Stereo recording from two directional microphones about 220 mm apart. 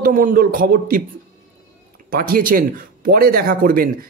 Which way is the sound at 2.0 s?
40° right (ahead or behind).